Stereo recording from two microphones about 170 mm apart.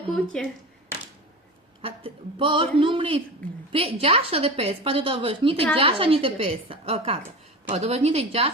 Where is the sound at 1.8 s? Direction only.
30° right (ahead or behind).